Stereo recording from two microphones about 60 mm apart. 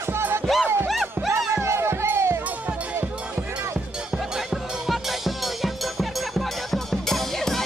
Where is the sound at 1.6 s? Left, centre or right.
Right.